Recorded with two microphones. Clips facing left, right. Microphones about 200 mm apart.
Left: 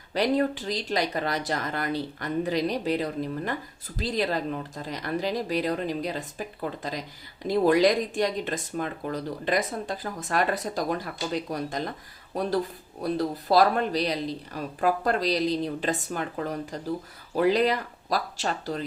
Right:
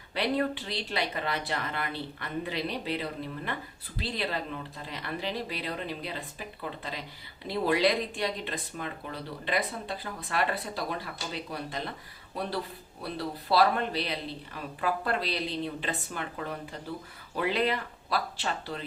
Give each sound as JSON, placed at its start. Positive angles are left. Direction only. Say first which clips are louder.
{"t": 0.1, "sound": "speech", "louder": "left 5 dB", "side_deg": 40}
{"t": 7.4, "sound": "speech", "louder": "left 6 dB", "side_deg": 45}